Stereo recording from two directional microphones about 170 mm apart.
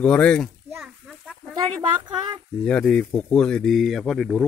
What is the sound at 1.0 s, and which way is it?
Chicken, centre (ahead or behind).